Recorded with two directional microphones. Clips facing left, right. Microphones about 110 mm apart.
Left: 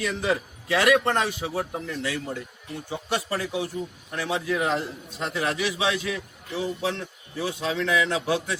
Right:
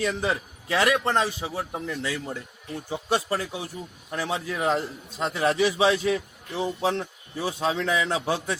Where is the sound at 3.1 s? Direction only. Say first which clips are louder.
Even; 30° right (ahead or behind).